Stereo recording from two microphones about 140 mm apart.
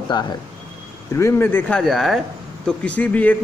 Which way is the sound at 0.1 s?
30° left (ahead or behind).